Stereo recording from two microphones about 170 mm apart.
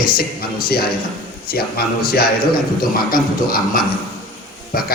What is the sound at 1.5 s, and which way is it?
A man's voice, 65° left (ahead or behind).